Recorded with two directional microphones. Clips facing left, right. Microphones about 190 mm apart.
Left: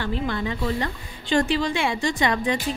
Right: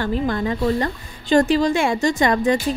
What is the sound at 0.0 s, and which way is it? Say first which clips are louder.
A woman's voice: right 5 dB; 45° right (ahead or behind).